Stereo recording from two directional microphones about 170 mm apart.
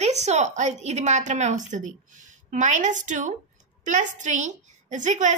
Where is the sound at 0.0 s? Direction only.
40° right (ahead or behind).